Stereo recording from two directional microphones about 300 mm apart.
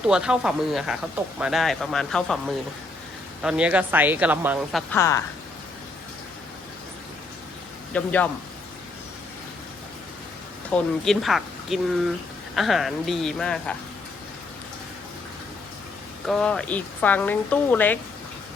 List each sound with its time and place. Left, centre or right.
0.0 s speech: centre
3.4 s speech: centre
4.9 s a woman's voice: centre
7.9 s speech: centre
10.7 s speech: centre
16.2 s speech: centre